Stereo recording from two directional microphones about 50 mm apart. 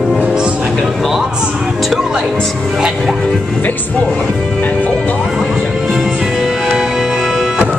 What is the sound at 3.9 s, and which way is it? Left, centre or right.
Speech, left.